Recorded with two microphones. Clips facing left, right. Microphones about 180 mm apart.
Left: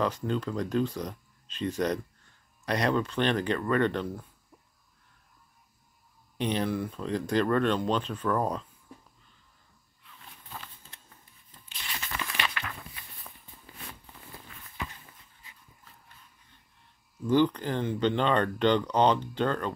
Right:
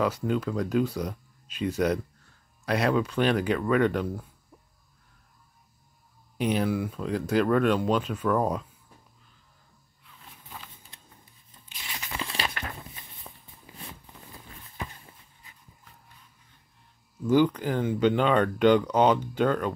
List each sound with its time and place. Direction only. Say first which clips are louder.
0.0 s speech: right 3 dB; 5° right (ahead or behind)
6.3 s speech: right 3 dB; 5° right (ahead or behind)
10.6 s a sound: even; 10° right (ahead or behind)
11.8 s crunch: right 1 dB; 20° right (ahead or behind)
12.4 s walk: right 2 dB; 40° right (ahead or behind)
17.3 s speech: right 2 dB; 10° right (ahead or behind)